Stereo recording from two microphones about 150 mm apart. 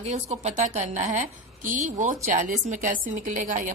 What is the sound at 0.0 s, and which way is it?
A woman's voice, 45° right (ahead or behind).